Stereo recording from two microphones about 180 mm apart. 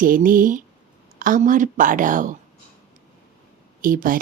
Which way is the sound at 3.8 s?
50° right (ahead or behind).